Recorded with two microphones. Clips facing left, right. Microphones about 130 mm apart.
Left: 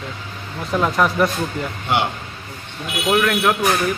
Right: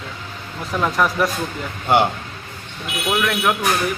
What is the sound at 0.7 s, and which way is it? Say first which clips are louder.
Speech: left 1 dB; 5° left (ahead or behind).